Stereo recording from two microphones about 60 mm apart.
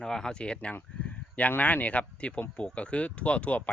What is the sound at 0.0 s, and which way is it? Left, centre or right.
Speech, centre.